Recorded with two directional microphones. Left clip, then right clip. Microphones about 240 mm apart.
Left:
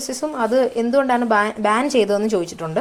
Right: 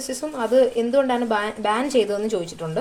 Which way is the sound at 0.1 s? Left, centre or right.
Left.